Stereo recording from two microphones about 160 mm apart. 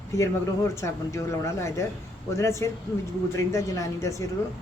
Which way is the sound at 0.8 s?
20° left (ahead or behind).